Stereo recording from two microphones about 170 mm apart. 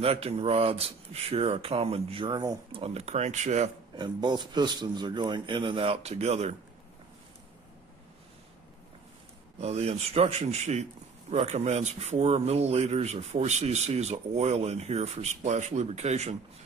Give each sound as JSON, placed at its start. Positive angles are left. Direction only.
{"t": 0.0, "sound": "speech", "side_deg": -35}
{"t": 3.9, "sound": "a man's voice", "side_deg": -25}
{"t": 9.6, "sound": "speech", "side_deg": -40}